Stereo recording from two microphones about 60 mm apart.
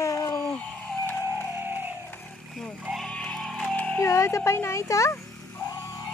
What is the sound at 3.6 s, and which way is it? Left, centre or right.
Music, left.